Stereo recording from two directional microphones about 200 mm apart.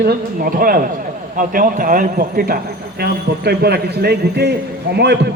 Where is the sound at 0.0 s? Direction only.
50° right (ahead or behind).